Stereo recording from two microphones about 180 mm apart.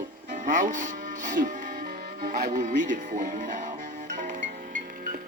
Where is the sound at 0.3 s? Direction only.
45° right (ahead or behind).